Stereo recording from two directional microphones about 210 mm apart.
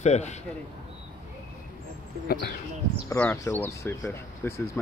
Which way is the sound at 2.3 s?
45° left (ahead or behind).